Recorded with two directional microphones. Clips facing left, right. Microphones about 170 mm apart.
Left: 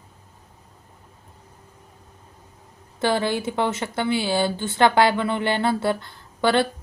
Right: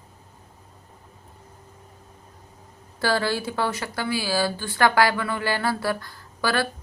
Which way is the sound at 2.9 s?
20° left (ahead or behind).